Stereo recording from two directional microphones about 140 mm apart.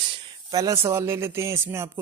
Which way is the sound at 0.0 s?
35° right (ahead or behind).